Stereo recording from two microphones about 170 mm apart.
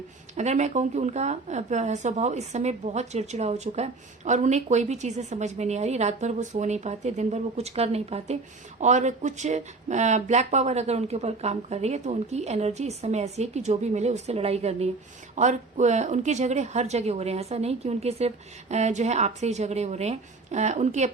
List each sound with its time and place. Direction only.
0.3 s speech: 40° right (ahead or behind)